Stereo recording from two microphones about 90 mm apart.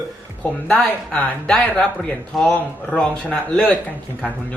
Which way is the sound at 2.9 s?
15° left (ahead or behind).